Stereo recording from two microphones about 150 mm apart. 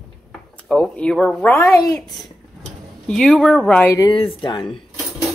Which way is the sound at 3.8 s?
20° left (ahead or behind).